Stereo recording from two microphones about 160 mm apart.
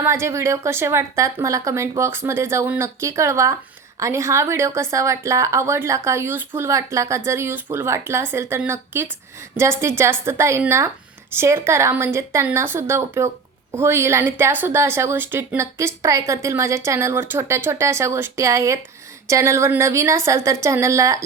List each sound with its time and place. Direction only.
0.0 s a woman's voice: 15° right (ahead or behind)